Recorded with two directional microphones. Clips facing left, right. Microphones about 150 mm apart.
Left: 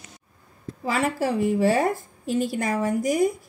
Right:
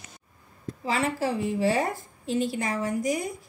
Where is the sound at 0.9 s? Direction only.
60° left (ahead or behind).